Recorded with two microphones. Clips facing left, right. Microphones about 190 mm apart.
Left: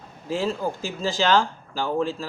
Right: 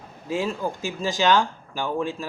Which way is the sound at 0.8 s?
15° right (ahead or behind).